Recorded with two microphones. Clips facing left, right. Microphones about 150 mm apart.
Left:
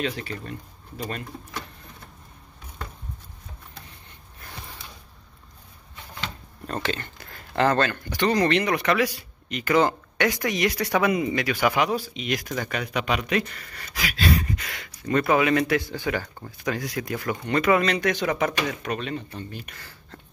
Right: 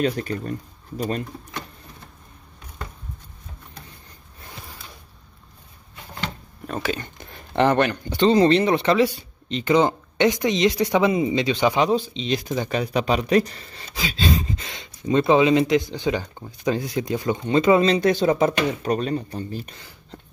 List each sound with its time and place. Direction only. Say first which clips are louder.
0.0 s speech: right 6 dB; 45° right (ahead or behind)
6.7 s speech: right 2 dB; 10° right (ahead or behind)
7.2 s speech: right 4 dB; 20° right (ahead or behind)